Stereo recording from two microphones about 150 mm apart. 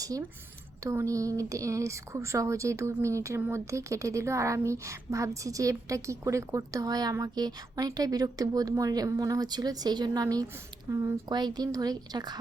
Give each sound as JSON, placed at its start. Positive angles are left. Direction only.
{"t": 0.9, "sound": "a woman's voice", "side_deg": -20}